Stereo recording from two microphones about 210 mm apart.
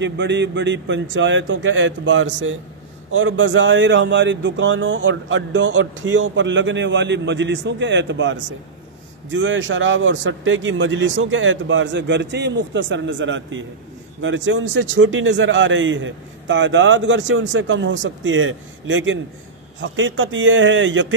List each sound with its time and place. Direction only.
0.0 s a man's voice: 55° right (ahead or behind)